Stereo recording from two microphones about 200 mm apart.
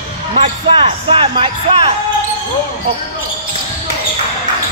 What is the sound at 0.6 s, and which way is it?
Music, 30° right (ahead or behind).